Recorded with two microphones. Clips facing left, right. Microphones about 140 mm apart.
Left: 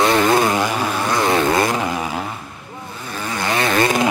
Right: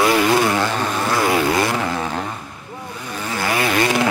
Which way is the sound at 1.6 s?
15° left (ahead or behind).